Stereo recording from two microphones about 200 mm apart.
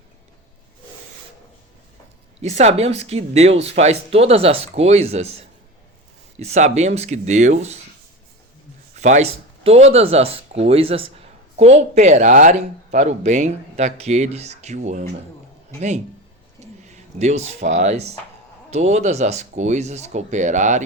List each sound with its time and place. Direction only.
2.4 s speech: 35° right (ahead or behind)
9.0 s speech: 35° right (ahead or behind)
16.6 s speech: 35° right (ahead or behind)